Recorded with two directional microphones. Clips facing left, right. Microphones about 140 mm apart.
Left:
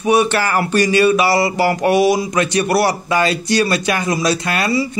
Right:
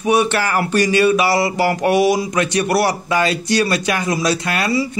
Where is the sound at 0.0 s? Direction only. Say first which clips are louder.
Left 1 dB; 35° left (ahead or behind).